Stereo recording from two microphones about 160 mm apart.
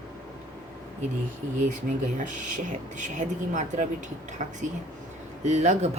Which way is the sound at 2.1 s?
55° right (ahead or behind).